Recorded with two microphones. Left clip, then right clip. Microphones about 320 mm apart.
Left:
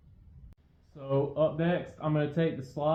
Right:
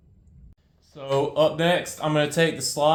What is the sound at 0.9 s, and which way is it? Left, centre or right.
Speech, centre.